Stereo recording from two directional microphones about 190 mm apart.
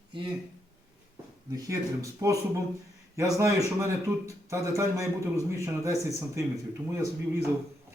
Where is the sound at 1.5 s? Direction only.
15° right (ahead or behind).